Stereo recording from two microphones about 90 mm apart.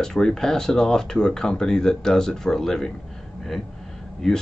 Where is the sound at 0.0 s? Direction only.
5° left (ahead or behind).